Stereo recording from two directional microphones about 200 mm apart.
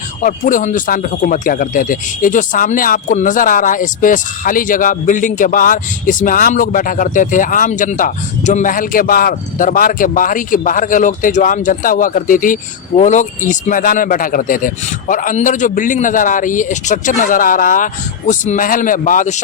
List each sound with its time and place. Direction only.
0.2 s speech: 40° left (ahead or behind)